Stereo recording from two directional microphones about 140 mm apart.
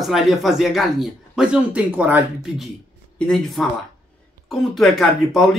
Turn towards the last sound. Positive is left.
turn(degrees=0)  # may be behind; listen again after turning